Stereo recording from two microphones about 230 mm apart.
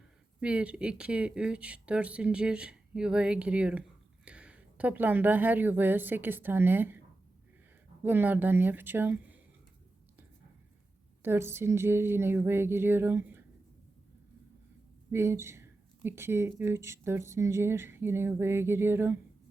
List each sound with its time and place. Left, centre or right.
0.3 s a woman's voice: centre
8.0 s speech: centre
11.2 s speech: centre
15.1 s speech: centre